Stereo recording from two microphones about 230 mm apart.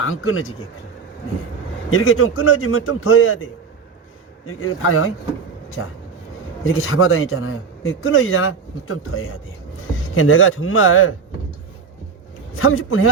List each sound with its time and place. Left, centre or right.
0.0 s speech: left
1.9 s speech: left
4.4 s speech: left
12.5 s speech: left